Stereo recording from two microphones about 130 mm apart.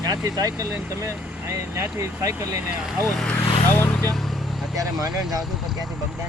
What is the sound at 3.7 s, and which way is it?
Speech, 15° left (ahead or behind).